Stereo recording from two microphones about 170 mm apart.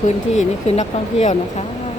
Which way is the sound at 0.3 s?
45° left (ahead or behind).